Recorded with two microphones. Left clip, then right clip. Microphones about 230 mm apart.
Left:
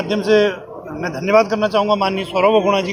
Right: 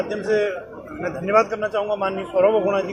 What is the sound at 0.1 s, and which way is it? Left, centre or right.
A man's voice, left.